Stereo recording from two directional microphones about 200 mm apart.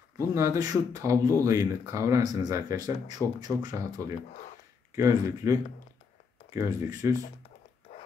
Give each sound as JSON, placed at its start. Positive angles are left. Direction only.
{"t": 0.3, "sound": "speech", "side_deg": -15}